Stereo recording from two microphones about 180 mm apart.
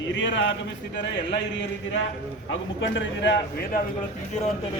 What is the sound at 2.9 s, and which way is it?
Speech, 85° left.